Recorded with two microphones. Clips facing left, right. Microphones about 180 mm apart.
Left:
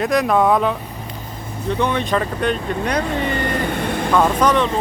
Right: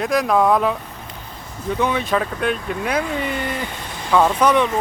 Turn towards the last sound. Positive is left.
turn(degrees=-10)  # may be behind; listen again after turning